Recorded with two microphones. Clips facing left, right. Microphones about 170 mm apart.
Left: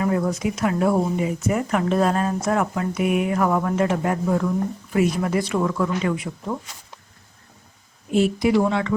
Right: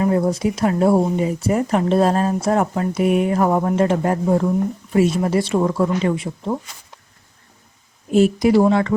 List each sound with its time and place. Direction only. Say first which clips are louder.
0.0 s speech: right 4 dB; 30° right (ahead or behind)
8.1 s speech: right 4 dB; 40° right (ahead or behind)